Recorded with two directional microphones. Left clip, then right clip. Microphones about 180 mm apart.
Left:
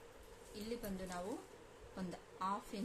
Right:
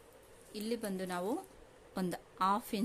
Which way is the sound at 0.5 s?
55° right (ahead or behind).